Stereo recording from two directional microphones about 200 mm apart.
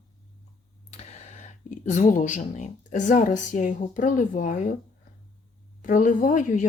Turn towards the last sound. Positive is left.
turn(degrees=40)  # may be behind; listen again after turning